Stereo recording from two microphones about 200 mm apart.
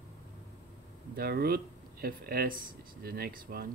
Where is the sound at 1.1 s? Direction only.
50° right (ahead or behind).